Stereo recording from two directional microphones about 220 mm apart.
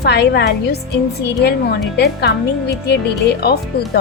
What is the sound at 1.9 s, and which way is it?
A woman's voice, 50° left (ahead or behind).